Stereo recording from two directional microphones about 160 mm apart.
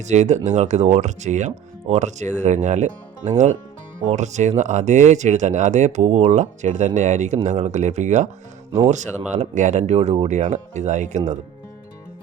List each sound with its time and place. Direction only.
0.0 s speech: 45° right (ahead or behind)